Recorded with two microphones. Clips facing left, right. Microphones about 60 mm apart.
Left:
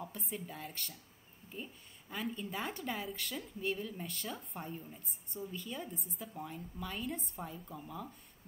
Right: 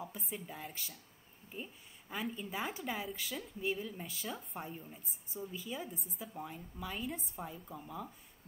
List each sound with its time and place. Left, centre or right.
0.0 s speech: centre